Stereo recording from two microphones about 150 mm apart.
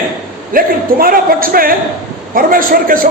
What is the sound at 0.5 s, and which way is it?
A man's voice, 70° right (ahead or behind).